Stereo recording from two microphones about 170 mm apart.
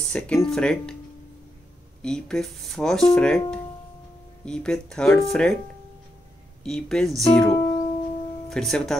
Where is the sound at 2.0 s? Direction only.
5° left (ahead or behind).